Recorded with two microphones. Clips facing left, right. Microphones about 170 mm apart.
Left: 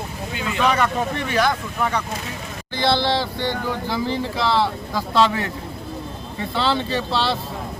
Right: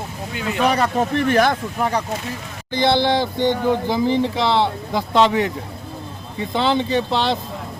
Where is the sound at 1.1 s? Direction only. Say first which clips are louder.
Right 6 dB; 50° right (ahead or behind).